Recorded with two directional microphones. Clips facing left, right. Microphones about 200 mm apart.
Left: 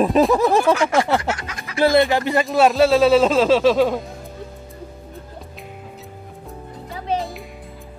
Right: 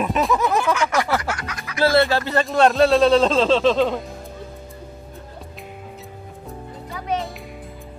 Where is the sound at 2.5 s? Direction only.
Centre (ahead or behind).